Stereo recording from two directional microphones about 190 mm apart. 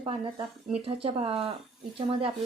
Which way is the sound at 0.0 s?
30° right (ahead or behind).